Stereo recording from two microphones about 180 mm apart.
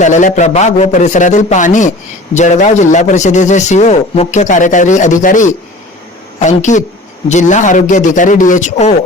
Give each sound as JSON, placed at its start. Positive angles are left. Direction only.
{"t": 0.0, "sound": "a man's voice", "side_deg": 45}